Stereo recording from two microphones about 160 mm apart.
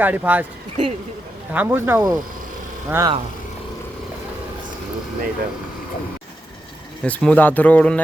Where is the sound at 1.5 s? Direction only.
10° right (ahead or behind).